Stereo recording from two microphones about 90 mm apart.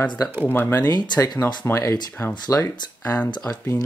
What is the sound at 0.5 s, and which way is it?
Speech, 20° left (ahead or behind).